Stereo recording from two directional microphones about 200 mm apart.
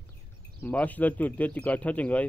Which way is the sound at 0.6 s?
10° left (ahead or behind).